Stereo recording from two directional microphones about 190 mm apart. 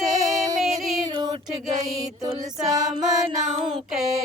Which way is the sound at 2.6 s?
20° right (ahead or behind).